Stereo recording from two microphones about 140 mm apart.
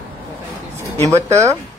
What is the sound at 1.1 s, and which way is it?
Speech, 20° right (ahead or behind).